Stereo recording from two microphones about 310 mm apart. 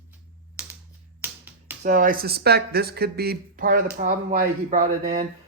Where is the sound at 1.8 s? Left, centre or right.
Right.